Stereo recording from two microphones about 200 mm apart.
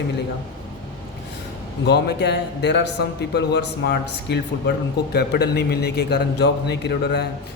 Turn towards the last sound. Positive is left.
turn(degrees=55)  # may be behind; listen again after turning